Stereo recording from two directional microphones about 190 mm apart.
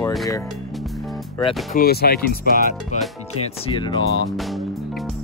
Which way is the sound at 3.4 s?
30° left (ahead or behind).